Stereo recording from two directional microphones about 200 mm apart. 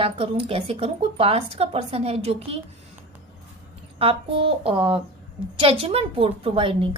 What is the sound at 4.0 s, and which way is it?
A woman's voice, 25° right (ahead or behind).